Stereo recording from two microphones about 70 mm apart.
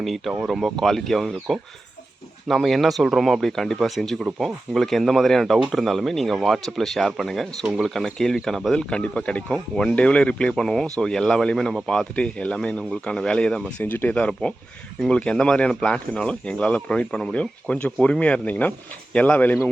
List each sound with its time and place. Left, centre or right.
0.0 s speech: centre
8.8 s a man's voice: centre
13.7 s a man's voice: left